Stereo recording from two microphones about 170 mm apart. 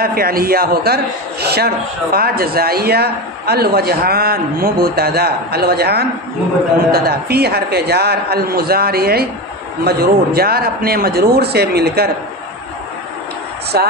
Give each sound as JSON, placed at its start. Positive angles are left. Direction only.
{"t": 0.0, "sound": "a man's voice", "side_deg": -60}
{"t": 13.7, "sound": "a man's voice", "side_deg": -65}